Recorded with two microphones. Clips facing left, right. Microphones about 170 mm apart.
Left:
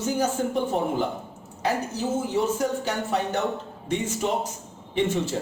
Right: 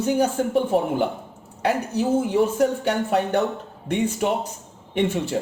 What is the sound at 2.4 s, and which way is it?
Speech, 60° right (ahead or behind).